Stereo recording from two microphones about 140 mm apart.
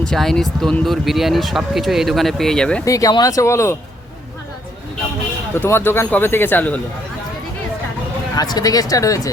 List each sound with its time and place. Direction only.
0.0 s speech: 5° left (ahead or behind)
2.8 s speech: 25° left (ahead or behind)
5.5 s speech: 15° left (ahead or behind)
8.4 s speech: 25° left (ahead or behind)